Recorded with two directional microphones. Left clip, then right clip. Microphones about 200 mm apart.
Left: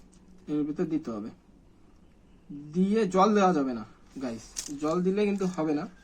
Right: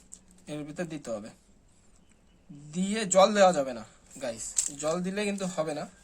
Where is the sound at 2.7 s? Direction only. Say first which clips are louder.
Right 1 dB; 65° right (ahead or behind).